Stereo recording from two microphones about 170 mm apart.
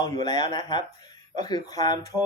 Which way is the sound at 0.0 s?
25° left (ahead or behind).